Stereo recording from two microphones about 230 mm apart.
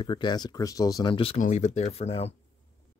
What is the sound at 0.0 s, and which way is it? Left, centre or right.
Speech, left.